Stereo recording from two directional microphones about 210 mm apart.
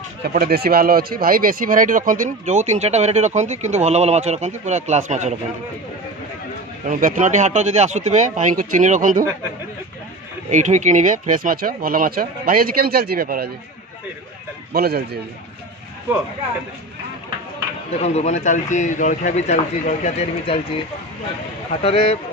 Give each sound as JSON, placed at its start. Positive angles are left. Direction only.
{"t": 0.2, "sound": "speech", "side_deg": -45}
{"t": 6.9, "sound": "speech", "side_deg": -40}
{"t": 10.5, "sound": "speech", "side_deg": -35}
{"t": 14.7, "sound": "speech", "side_deg": -50}
{"t": 17.9, "sound": "a man's voice", "side_deg": 30}
{"t": 21.8, "sound": "speech", "side_deg": 25}